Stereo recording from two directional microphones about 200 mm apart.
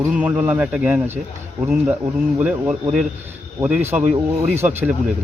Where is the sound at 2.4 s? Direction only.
5° right (ahead or behind).